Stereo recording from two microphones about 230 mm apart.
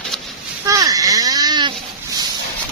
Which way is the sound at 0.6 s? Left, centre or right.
Centre.